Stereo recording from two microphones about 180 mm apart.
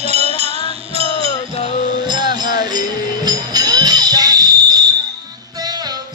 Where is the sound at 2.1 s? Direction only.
25° right (ahead or behind).